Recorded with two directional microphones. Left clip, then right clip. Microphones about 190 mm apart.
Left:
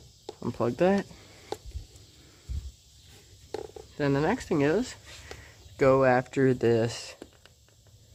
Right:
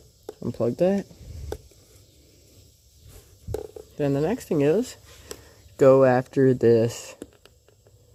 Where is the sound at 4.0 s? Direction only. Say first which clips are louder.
Right 2 dB; 10° right (ahead or behind).